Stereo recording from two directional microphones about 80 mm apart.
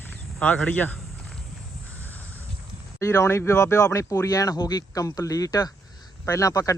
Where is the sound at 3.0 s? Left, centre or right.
Left.